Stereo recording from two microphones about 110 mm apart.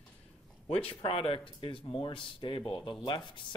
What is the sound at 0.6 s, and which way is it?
Speech, 65° left (ahead or behind).